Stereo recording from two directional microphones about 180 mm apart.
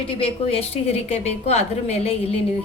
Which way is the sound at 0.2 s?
35° left (ahead or behind).